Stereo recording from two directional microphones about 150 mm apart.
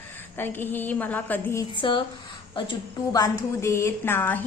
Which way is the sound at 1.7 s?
35° left (ahead or behind).